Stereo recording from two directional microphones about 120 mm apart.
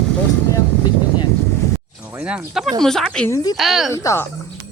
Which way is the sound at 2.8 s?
5° left (ahead or behind).